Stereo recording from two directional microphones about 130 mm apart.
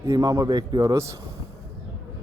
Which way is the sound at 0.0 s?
25° right (ahead or behind).